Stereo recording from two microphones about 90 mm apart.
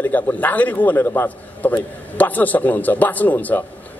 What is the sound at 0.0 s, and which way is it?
A man's voice, 20° left (ahead or behind).